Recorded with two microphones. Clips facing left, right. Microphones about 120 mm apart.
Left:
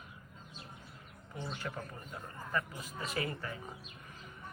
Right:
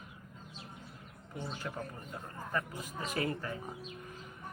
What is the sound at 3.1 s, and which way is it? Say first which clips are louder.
Speech: right 3 dB; 40° right (ahead or behind).